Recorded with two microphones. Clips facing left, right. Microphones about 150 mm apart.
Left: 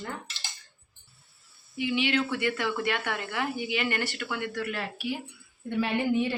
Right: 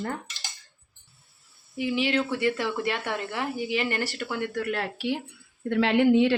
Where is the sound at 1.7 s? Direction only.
35° right (ahead or behind).